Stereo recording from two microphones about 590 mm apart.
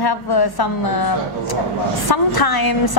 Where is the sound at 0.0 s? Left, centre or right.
Left.